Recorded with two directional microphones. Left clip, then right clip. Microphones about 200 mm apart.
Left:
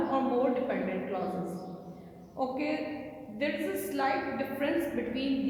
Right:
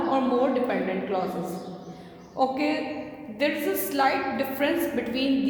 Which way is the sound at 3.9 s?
40° right (ahead or behind).